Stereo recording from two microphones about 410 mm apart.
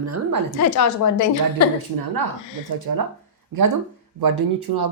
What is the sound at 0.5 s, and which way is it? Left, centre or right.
A woman's voice, left.